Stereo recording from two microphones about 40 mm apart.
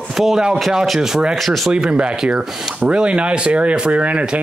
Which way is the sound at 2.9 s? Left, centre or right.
Right.